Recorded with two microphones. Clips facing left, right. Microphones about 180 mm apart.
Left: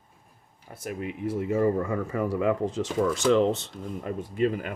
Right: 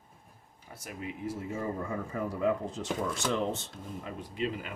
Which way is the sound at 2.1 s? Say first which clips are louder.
Left 4 dB; 90° left.